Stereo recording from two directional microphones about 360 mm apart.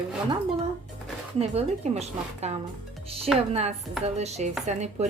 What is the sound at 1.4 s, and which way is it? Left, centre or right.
A woman's voice, centre.